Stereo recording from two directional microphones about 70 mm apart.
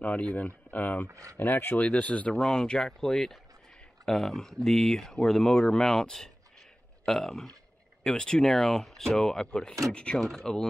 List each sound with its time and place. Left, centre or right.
0.0 s speech: centre
1.1 s speech: right
1.4 s speech: left
2.3 s speech: centre